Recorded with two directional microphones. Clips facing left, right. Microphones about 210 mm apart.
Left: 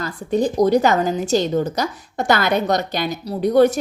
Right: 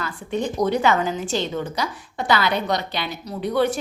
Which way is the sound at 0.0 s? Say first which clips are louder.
Left 6 dB; 35° left (ahead or behind).